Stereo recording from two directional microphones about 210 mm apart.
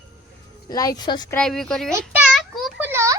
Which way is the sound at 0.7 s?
20° left (ahead or behind).